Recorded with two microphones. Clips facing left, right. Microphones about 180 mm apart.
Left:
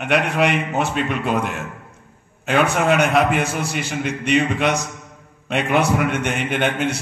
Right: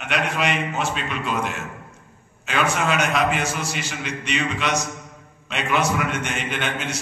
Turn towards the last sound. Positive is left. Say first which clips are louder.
# left 7 dB
turn(degrees=60)  # may be behind; listen again after turning